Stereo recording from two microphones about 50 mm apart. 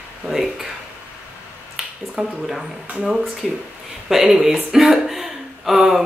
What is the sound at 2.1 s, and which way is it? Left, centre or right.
Speech, centre.